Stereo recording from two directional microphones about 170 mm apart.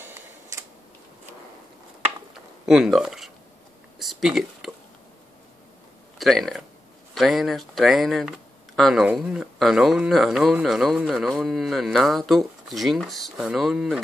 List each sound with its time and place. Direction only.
0.5 s tick-tock: 15° right (ahead or behind)
2.6 s speech: centre (ahead or behind)
4.0 s a sound: centre (ahead or behind)
6.1 s speech: centre (ahead or behind)